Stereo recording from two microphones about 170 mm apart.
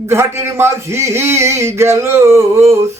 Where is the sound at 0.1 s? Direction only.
15° right (ahead or behind).